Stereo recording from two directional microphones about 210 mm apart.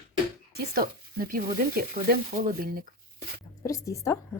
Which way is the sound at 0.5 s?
45° right (ahead or behind).